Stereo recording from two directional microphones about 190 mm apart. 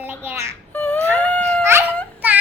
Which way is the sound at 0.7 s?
10° left (ahead or behind).